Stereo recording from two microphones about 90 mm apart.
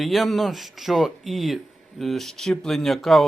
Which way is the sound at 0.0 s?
Centre (ahead or behind).